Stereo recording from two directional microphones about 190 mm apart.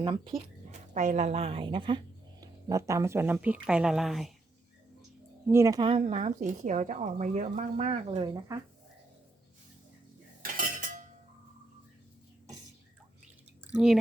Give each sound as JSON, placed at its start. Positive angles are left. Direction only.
{"t": 0.0, "sound": "a woman's voice", "side_deg": -25}
{"t": 5.5, "sound": "speech", "side_deg": -15}
{"t": 6.1, "sound": "speech", "side_deg": -40}
{"t": 8.2, "sound": "speech", "side_deg": -20}
{"t": 10.4, "sound": "dishes", "side_deg": -45}
{"t": 13.7, "sound": "speech", "side_deg": 0}